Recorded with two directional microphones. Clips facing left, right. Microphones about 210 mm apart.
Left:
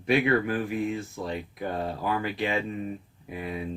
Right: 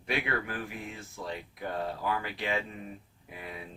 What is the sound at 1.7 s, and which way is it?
Speech, 25° left (ahead or behind).